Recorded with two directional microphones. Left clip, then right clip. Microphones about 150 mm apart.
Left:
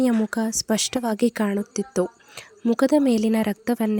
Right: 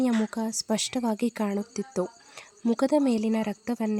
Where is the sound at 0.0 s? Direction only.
25° left (ahead or behind).